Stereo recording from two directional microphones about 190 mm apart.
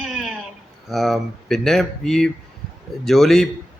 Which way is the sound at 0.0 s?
Centre (ahead or behind).